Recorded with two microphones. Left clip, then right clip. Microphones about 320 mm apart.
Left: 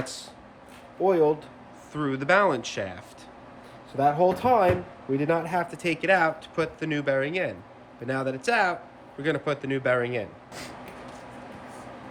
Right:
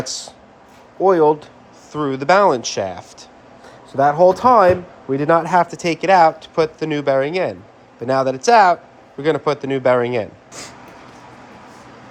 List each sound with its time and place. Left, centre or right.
0.0 s speech: centre
1.9 s speech: centre
4.3 s speech: right